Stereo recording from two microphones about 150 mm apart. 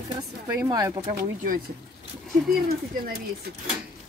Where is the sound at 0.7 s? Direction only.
25° right (ahead or behind).